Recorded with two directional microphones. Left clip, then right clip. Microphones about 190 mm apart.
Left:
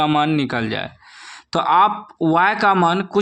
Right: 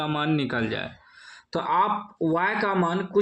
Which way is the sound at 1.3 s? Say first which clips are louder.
Left 9 dB; 45° left (ahead or behind).